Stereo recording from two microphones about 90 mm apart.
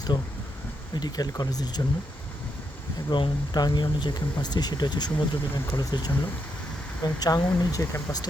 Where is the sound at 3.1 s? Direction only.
60° left (ahead or behind).